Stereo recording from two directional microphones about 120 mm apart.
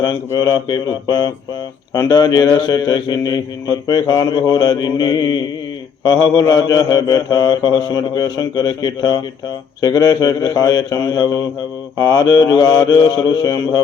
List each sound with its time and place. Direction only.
0.0 s a man's voice: 25° left (ahead or behind)